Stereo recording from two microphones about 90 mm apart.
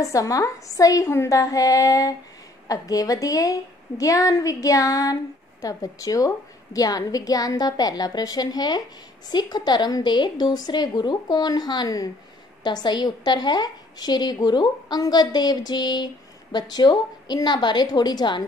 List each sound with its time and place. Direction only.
0.0 s a woman's voice: 40° left (ahead or behind)